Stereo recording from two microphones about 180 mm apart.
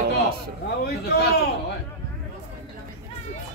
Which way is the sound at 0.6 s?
60° left (ahead or behind).